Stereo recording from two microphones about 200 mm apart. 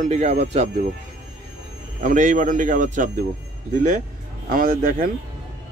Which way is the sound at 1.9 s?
40° right (ahead or behind).